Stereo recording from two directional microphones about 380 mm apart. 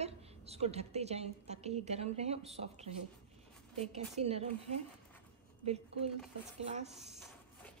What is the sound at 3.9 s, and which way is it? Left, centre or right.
Speech, centre.